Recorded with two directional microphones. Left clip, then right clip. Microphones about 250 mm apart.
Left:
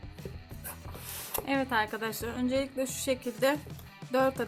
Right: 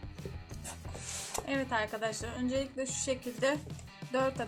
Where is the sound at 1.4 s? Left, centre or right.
Left.